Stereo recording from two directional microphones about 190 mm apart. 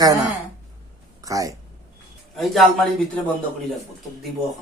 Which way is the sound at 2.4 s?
Centre (ahead or behind).